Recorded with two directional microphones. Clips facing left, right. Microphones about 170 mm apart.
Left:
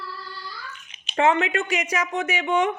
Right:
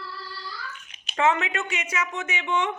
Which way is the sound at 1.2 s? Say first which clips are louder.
Left 3 dB; 30° left (ahead or behind).